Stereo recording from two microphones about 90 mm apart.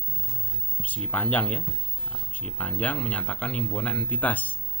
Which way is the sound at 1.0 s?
15° left (ahead or behind).